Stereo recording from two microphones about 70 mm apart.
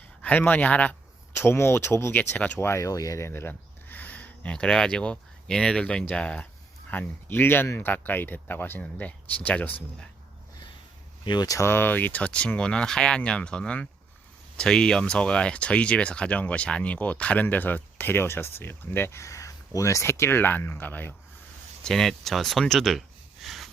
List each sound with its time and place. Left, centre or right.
0.2 s speech: left
1.4 s speech: left
2.1 s speech: left
2.6 s speech: left
11.3 s speech: left
11.5 s speech: left
19.2 s speech: left
21.8 s speech: centre